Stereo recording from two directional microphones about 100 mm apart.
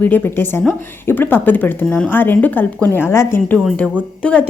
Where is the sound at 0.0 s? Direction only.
20° left (ahead or behind).